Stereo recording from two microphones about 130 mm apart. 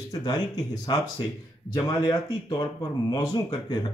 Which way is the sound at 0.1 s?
30° left (ahead or behind).